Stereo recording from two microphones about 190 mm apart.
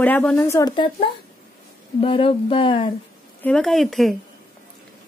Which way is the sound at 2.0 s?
30° left (ahead or behind).